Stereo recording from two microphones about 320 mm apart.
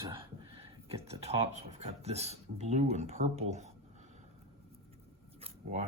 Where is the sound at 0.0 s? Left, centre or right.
Centre.